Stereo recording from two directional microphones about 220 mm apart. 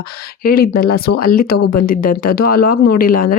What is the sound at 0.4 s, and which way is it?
Speech, 40° left (ahead or behind).